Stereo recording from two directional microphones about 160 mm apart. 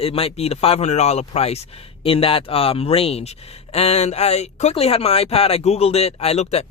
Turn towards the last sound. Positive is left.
turn(degrees=40)  # may be behind; listen again after turning